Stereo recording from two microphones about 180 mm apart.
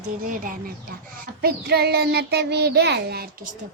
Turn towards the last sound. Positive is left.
turn(degrees=-60)  # may be behind; listen again after turning